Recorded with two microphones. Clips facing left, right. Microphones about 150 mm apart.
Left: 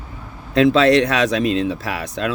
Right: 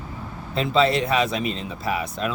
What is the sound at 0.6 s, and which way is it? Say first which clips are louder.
Speech: left 7 dB; 85° left.